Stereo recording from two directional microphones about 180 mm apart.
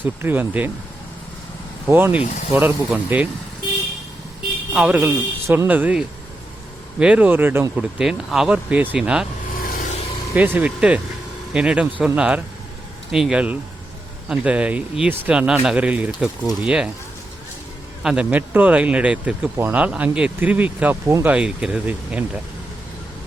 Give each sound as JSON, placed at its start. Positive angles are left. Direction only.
{"t": 0.0, "sound": "speech", "side_deg": -10}
{"t": 1.9, "sound": "speech", "side_deg": -10}
{"t": 4.7, "sound": "speech", "side_deg": -5}
{"t": 9.6, "sound": "vehicle", "side_deg": 50}
{"t": 10.3, "sound": "speech", "side_deg": -10}
{"t": 18.0, "sound": "speech", "side_deg": -5}